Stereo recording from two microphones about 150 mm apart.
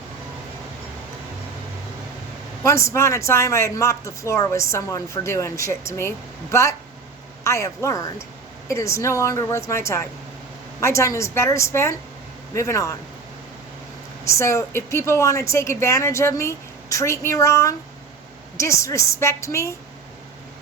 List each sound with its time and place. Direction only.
2.6 s speech: 20° left (ahead or behind)
14.3 s speech: 20° left (ahead or behind)